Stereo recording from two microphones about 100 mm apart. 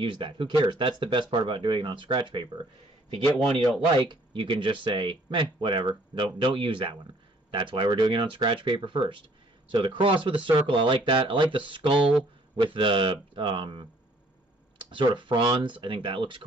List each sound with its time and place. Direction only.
0.0 s speech: 60° right (ahead or behind)
3.9 s speech: 55° right (ahead or behind)